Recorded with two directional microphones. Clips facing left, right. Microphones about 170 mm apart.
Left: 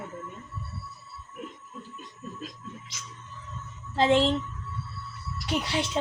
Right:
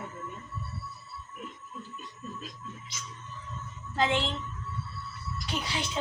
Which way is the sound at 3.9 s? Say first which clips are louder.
Left 6 dB; 30° left (ahead or behind).